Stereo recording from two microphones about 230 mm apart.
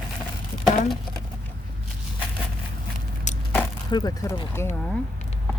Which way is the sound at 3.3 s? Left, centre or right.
Left.